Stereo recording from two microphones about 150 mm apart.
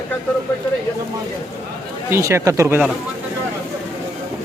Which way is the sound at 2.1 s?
20° right (ahead or behind).